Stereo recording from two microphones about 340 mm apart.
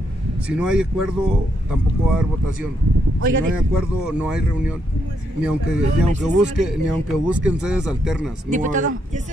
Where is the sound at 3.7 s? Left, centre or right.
Centre.